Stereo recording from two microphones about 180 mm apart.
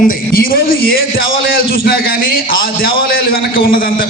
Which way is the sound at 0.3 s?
55° left (ahead or behind).